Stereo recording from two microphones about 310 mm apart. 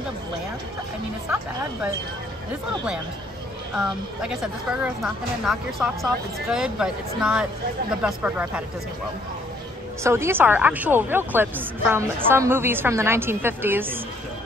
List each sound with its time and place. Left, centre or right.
3.7 s a woman's voice: centre
10.0 s a woman's voice: centre